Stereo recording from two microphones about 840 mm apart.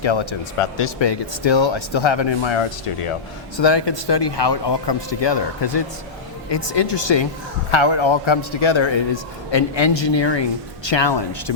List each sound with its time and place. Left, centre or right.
0.0 s speech: left